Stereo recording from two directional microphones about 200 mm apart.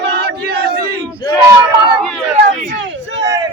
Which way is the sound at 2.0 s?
Centre (ahead or behind).